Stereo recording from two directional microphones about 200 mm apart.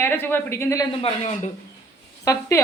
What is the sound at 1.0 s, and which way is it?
Speech, 35° left (ahead or behind).